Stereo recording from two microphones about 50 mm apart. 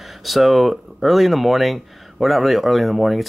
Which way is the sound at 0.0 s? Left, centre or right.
Centre.